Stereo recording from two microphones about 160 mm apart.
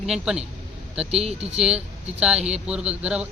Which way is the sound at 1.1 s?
40° right (ahead or behind).